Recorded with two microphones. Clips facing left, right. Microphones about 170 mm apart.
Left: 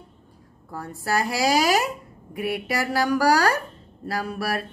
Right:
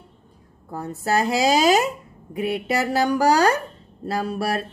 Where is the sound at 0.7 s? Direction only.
20° right (ahead or behind).